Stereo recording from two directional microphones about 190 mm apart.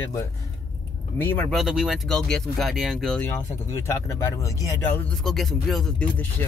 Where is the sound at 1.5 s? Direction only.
Centre (ahead or behind).